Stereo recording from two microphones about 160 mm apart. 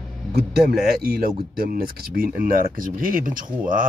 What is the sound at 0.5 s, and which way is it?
Speech, 75° right (ahead or behind).